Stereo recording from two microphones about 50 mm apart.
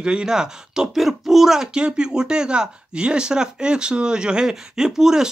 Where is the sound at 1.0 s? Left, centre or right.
Centre.